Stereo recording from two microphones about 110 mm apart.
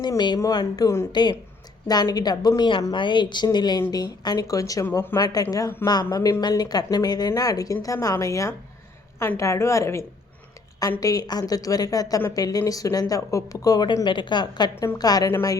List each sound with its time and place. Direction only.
0.3 s speech: 30° left (ahead or behind)
1.1 s speech: 40° left (ahead or behind)
2.6 s a woman's voice: 50° left (ahead or behind); by 15.5 s 25° left (ahead or behind)